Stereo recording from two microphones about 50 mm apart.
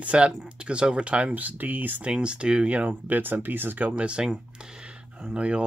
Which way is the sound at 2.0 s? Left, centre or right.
Right.